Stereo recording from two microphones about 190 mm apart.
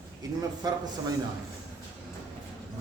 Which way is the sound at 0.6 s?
20° right (ahead or behind).